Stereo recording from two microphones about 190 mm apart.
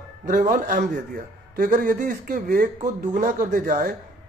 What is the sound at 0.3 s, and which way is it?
Speech, 45° right (ahead or behind).